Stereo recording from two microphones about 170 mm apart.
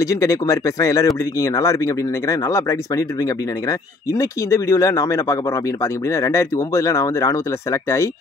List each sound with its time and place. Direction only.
0.0 s speech: 20° left (ahead or behind)